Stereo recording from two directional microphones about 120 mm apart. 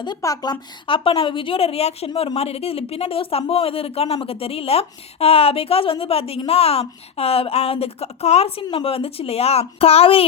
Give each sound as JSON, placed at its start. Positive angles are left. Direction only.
{"t": 0.2, "sound": "a woman's voice", "side_deg": 30}